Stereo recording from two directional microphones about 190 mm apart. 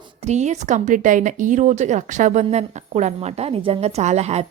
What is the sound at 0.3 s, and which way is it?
A woman's voice, 35° right (ahead or behind).